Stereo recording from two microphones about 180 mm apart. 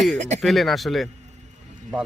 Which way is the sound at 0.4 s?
Centre (ahead or behind).